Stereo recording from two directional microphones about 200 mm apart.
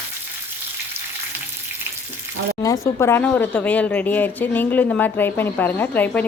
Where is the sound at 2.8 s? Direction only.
10° left (ahead or behind).